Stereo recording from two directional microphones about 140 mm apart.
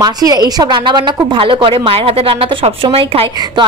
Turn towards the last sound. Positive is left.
turn(degrees=-40)  # may be behind; listen again after turning